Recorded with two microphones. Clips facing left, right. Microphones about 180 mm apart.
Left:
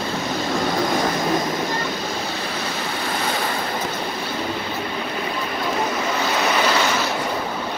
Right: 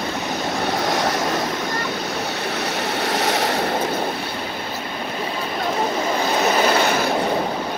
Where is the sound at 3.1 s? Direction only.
75° right (ahead or behind).